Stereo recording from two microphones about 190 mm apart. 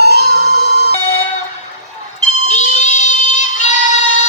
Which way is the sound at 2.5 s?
40° left (ahead or behind).